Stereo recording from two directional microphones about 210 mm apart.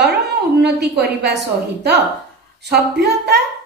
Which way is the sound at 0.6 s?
50° right (ahead or behind).